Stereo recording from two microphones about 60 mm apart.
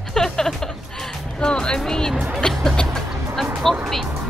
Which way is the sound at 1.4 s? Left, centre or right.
Centre.